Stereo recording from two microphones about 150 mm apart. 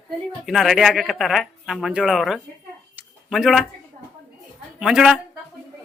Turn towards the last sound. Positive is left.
turn(degrees=-5)  # may be behind; listen again after turning